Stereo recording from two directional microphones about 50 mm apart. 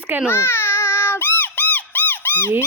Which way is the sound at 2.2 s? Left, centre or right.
Left.